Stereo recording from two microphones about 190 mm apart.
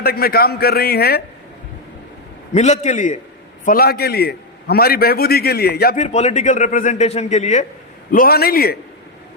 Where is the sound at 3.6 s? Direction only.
50° left (ahead or behind).